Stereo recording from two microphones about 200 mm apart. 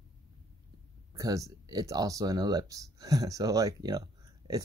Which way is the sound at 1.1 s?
15° right (ahead or behind).